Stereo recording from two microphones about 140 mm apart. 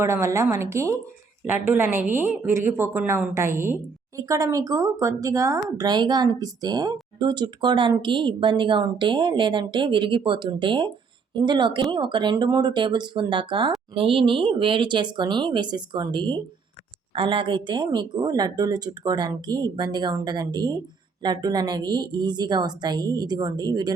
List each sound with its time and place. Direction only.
0.0 s speech: 20° right (ahead or behind)